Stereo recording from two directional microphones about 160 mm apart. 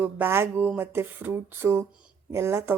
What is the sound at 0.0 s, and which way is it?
A woman's voice, 15° right (ahead or behind).